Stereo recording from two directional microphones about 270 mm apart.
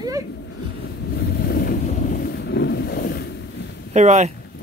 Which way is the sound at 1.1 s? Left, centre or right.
Left.